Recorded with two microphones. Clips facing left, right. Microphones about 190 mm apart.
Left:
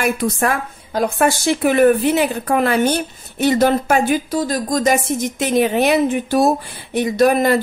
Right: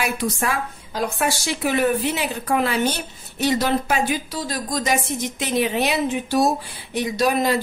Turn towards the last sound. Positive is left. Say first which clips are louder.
# left 6 dB
turn(degrees=55)  # may be behind; listen again after turning